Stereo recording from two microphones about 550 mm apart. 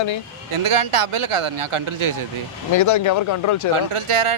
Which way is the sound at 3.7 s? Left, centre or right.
Right.